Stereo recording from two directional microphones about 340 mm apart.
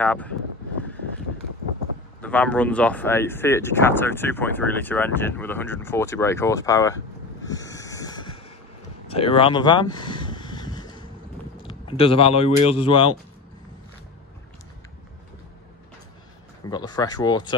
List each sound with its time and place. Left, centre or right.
0.0 s speech: centre
2.2 s speech: centre
7.4 s snort: centre
9.0 s a sound: centre
11.6 s speech: centre
16.6 s speech: centre